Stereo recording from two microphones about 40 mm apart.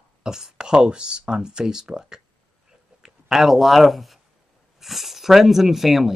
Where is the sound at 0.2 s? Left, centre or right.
Centre.